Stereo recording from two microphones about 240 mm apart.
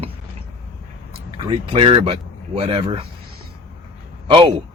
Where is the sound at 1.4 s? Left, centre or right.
Centre.